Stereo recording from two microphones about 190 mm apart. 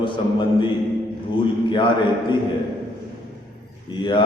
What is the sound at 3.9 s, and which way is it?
Speech, 25° left (ahead or behind).